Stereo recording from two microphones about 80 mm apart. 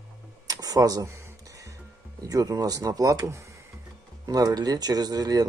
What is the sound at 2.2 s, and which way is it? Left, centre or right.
Speech, right.